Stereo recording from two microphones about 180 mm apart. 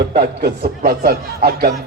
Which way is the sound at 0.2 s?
60° right (ahead or behind).